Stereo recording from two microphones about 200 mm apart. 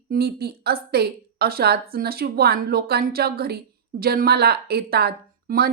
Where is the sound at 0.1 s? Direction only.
50° right (ahead or behind).